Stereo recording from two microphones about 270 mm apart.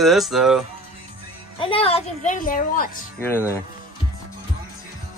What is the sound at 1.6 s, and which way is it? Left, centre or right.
A woman's voice, left.